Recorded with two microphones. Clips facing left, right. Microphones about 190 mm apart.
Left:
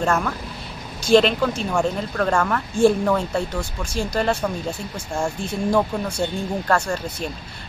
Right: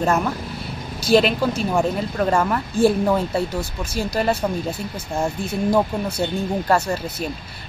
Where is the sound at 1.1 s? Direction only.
5° right (ahead or behind).